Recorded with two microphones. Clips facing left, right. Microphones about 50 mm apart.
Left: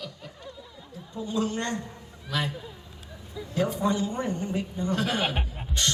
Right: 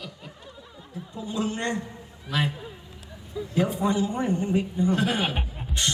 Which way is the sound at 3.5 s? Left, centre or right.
Right.